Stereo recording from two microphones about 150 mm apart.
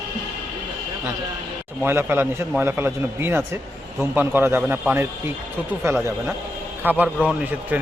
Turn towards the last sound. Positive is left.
turn(degrees=-10)  # may be behind; listen again after turning